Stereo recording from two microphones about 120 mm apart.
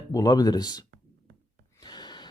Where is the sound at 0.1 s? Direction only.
30° left (ahead or behind).